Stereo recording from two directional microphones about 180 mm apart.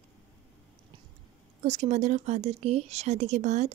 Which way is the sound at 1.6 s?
40° right (ahead or behind).